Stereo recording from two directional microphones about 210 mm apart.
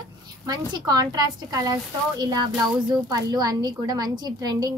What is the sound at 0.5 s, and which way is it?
A woman's voice, 20° right (ahead or behind).